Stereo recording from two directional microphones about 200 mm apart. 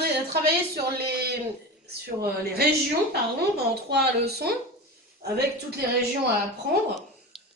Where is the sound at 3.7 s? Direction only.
55° right (ahead or behind).